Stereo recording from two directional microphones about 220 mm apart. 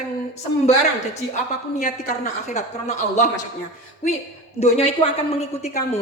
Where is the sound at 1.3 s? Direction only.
35° left (ahead or behind).